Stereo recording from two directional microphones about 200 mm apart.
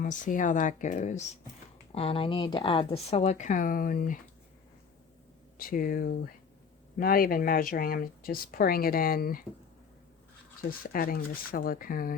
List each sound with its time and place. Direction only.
0.0 s speech: 40° left (ahead or behind)
5.5 s speech: 45° left (ahead or behind)
10.7 s speech: 45° left (ahead or behind)